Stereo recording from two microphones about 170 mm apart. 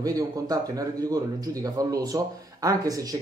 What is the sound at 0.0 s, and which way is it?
Speech, 20° right (ahead or behind).